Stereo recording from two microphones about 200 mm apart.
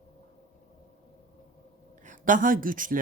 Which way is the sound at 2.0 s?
40° right (ahead or behind).